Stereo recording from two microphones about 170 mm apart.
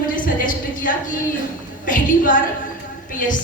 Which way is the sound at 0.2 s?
55° left (ahead or behind).